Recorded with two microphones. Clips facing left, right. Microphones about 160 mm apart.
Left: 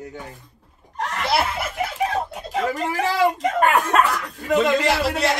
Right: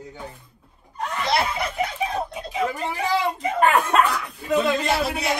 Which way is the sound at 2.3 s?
85° left.